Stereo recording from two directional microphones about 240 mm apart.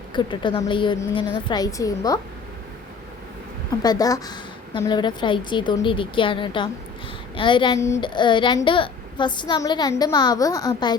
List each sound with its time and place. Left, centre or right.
0.1 s a woman's voice: centre
3.8 s a woman's voice: centre